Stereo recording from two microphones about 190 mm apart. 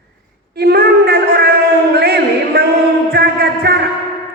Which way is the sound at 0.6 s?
55° right (ahead or behind).